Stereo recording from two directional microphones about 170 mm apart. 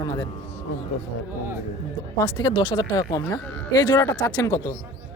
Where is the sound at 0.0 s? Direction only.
20° left (ahead or behind).